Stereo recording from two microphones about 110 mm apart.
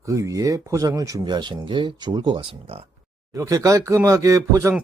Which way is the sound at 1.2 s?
45° right (ahead or behind).